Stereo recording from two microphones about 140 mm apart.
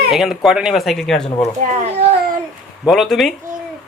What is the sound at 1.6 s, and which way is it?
Speech, 55° right (ahead or behind).